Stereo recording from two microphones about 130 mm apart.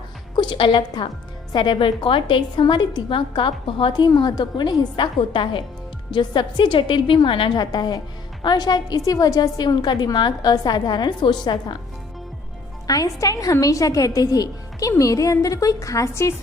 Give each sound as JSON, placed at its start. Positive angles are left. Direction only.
{"t": 0.3, "sound": "a woman's voice", "side_deg": 40}
{"t": 12.9, "sound": "a woman's voice", "side_deg": 25}